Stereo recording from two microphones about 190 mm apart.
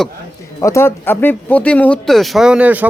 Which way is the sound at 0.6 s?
15° left (ahead or behind).